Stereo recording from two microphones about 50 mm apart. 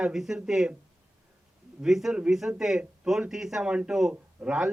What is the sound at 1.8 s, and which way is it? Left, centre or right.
A man's voice, centre.